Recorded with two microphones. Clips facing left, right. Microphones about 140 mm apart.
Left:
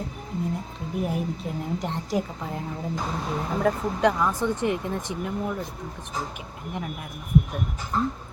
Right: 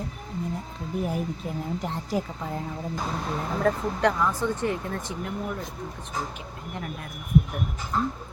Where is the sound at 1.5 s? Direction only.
Centre (ahead or behind).